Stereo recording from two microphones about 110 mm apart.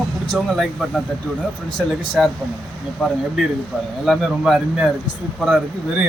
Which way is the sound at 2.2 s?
5° right (ahead or behind).